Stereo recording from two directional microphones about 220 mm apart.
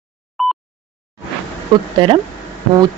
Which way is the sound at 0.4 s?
Centre (ahead or behind).